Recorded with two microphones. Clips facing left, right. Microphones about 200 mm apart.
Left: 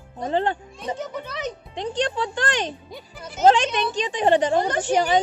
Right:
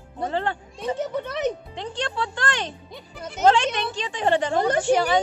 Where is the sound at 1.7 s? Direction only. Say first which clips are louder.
Left 5 dB; 15° left (ahead or behind).